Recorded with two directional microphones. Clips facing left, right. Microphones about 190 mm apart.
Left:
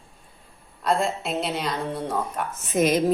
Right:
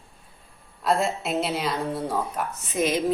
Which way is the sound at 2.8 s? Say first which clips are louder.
Left 3 dB; 50° left (ahead or behind).